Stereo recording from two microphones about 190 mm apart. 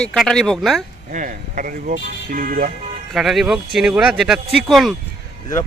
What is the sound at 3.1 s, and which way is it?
Speech, centre (ahead or behind).